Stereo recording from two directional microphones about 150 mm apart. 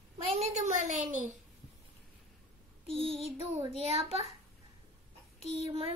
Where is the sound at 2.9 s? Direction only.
40° right (ahead or behind).